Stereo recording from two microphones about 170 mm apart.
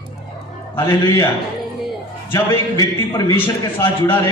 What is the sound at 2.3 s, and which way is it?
Speech, 25° left (ahead or behind).